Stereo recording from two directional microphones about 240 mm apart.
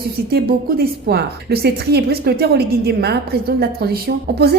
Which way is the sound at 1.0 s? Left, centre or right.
Right.